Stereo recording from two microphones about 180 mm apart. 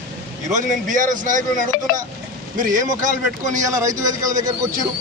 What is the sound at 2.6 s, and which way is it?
Speech, 45° right (ahead or behind).